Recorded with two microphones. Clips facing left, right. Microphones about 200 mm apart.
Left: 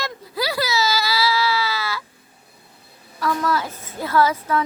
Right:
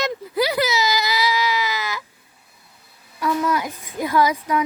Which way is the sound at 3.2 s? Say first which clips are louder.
Right 1 dB; 15° right (ahead or behind).